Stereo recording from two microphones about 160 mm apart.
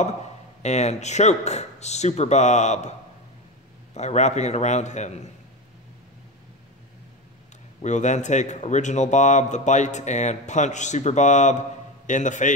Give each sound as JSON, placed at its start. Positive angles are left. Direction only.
{"t": 0.6, "sound": "a man's voice", "side_deg": 45}
{"t": 3.9, "sound": "a man's voice", "side_deg": 45}
{"t": 7.8, "sound": "a man's voice", "side_deg": 50}